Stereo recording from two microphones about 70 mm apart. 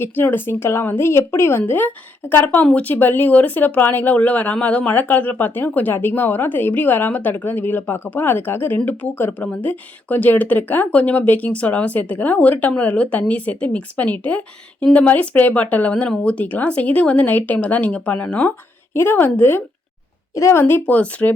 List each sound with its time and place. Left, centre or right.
0.0 s speech: left
18.9 s speech: left
20.3 s speech: left